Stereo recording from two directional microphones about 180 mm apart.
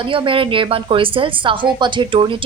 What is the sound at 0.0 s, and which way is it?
A woman's voice, 30° right (ahead or behind).